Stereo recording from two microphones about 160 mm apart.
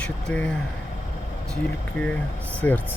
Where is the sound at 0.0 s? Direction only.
5° left (ahead or behind).